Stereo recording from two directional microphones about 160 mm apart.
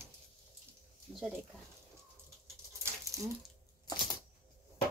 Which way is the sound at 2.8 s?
20° right (ahead or behind).